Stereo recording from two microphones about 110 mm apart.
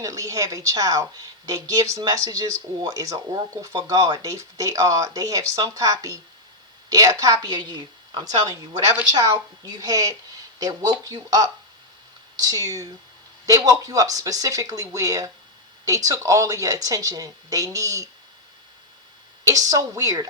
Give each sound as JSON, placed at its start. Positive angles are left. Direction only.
{"t": 0.0, "sound": "a woman's voice", "side_deg": -30}
{"t": 19.5, "sound": "a woman's voice", "side_deg": -30}